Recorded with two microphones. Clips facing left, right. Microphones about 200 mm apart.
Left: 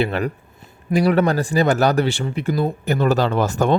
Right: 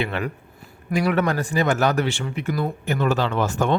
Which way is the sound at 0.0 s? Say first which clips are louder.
Left 5 dB; 35° left (ahead or behind).